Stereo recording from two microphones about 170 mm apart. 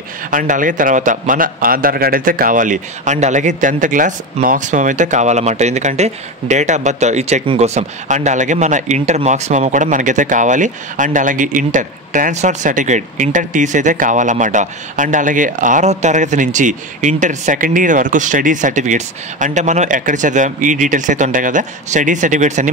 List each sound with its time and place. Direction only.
0.3 s a man's voice: 50° right (ahead or behind)